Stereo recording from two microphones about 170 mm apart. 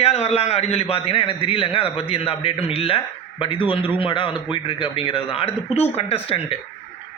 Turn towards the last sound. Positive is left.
turn(degrees=35)  # may be behind; listen again after turning